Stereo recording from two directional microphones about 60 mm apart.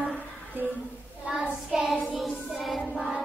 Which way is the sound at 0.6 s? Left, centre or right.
Right.